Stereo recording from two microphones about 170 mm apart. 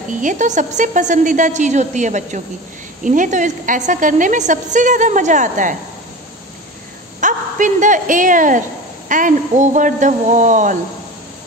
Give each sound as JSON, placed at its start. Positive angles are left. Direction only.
{"t": 0.2, "sound": "a woman's voice", "side_deg": -50}
{"t": 7.2, "sound": "a woman's voice", "side_deg": -50}